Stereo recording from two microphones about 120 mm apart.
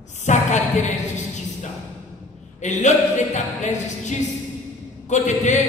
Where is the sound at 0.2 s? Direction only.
80° left.